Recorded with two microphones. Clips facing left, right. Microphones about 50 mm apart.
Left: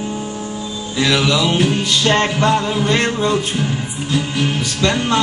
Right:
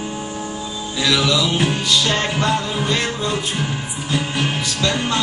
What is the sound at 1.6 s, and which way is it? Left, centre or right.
Music, centre.